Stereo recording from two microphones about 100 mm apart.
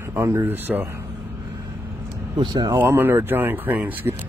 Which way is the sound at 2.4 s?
45° right (ahead or behind).